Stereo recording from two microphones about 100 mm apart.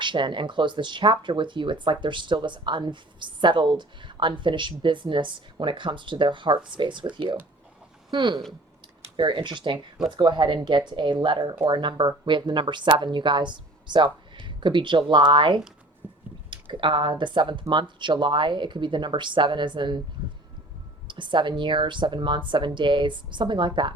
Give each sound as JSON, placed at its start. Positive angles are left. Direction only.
{"t": 0.0, "sound": "speech", "side_deg": -50}
{"t": 8.1, "sound": "speech", "side_deg": -50}
{"t": 16.0, "sound": "a sound", "side_deg": -20}
{"t": 16.5, "sound": "speech", "side_deg": -60}
{"t": 21.1, "sound": "speech", "side_deg": -50}